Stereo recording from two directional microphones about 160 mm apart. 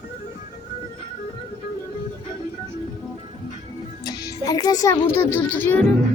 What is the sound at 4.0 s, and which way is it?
Speech, 20° left (ahead or behind).